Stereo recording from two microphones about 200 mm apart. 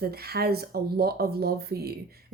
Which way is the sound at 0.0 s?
50° right (ahead or behind).